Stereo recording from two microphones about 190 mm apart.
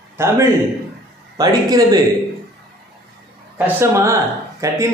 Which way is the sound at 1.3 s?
20° right (ahead or behind).